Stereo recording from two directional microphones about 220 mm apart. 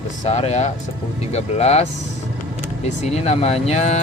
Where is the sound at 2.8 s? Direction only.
30° left (ahead or behind).